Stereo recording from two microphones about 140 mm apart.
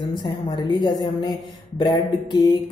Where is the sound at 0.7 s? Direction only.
30° left (ahead or behind).